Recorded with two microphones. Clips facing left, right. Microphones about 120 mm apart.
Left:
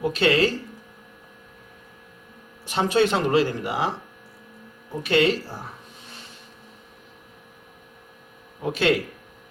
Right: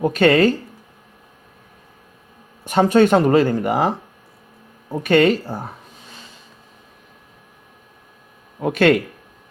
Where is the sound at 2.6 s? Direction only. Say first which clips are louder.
Right 7 dB; 50° right (ahead or behind).